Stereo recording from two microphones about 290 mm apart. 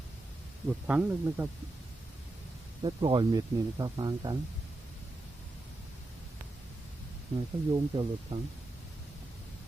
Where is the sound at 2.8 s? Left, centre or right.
Centre.